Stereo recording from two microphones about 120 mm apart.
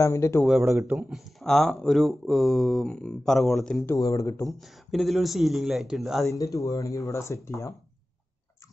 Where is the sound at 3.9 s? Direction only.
30° left (ahead or behind).